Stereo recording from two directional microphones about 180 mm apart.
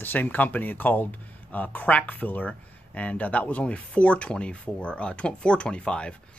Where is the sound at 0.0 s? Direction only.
10° left (ahead or behind).